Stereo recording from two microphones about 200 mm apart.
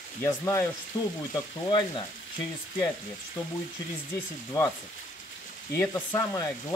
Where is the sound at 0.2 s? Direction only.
15° left (ahead or behind).